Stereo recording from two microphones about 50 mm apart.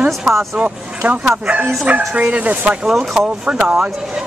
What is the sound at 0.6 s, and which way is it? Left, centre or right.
Speech, right.